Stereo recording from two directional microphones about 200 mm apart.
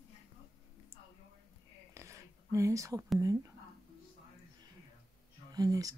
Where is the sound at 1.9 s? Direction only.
15° right (ahead or behind).